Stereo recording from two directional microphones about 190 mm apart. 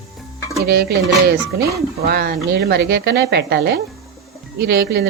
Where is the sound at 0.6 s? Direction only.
60° right (ahead or behind).